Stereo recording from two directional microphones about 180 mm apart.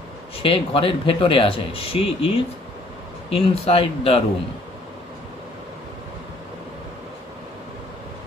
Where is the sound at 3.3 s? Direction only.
30° left (ahead or behind).